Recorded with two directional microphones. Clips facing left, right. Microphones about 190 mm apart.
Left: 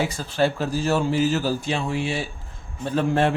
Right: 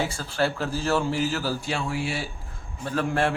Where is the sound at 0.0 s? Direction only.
15° left (ahead or behind).